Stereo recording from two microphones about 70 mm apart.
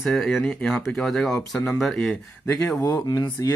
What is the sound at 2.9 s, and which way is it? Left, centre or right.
Speech, left.